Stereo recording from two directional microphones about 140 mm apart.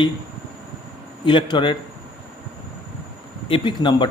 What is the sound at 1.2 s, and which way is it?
Speech, 35° left (ahead or behind).